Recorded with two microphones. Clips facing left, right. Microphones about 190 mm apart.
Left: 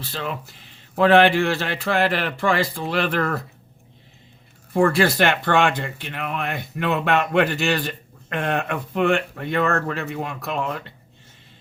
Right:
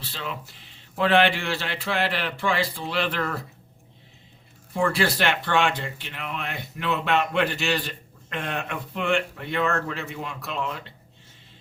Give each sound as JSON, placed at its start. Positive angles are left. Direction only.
{"t": 0.0, "sound": "speech", "side_deg": 50}
{"t": 4.7, "sound": "speech", "side_deg": 50}